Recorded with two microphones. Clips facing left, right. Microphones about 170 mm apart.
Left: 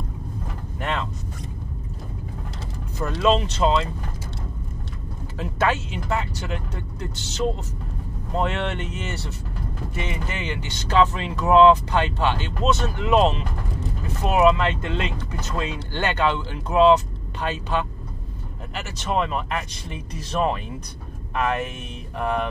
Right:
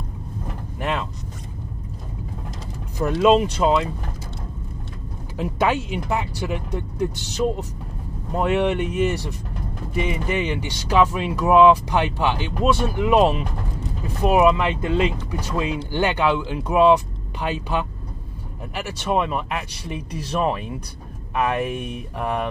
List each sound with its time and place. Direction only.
0.7 s vehicle: 15° right (ahead or behind)
3.0 s speech: 15° right (ahead or behind)
5.4 s speech: 15° right (ahead or behind)